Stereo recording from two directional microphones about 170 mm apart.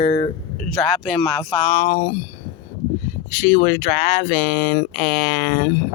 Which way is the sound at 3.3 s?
50° left (ahead or behind).